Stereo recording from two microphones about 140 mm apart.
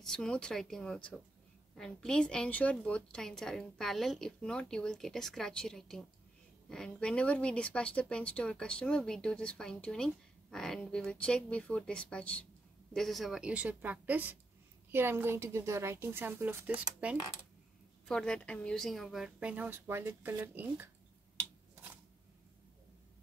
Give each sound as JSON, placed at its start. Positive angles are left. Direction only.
{"t": 0.0, "sound": "a woman's voice", "side_deg": 5}
{"t": 18.0, "sound": "a woman's voice", "side_deg": 5}